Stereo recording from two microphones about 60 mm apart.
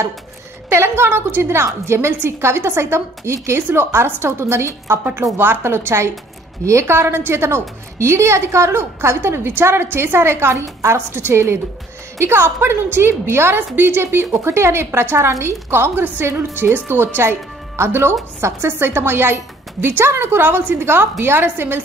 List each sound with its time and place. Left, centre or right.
0.7 s a woman's voice: right
5.4 s a woman's voice: right
6.6 s a woman's voice: right
11.1 s a woman's voice: right